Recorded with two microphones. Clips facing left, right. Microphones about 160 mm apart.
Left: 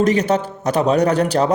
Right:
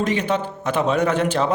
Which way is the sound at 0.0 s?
40° left (ahead or behind).